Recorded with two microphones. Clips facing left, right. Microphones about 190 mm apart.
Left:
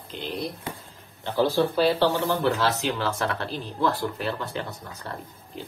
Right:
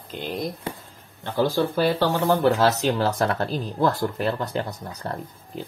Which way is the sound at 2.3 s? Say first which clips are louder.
Right 5 dB; 40° right (ahead or behind).